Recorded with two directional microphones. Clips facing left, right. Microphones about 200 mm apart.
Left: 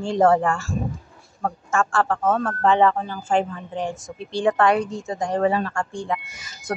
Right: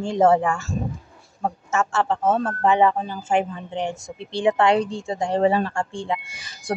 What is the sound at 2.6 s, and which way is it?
A woman's voice, 15° right (ahead or behind).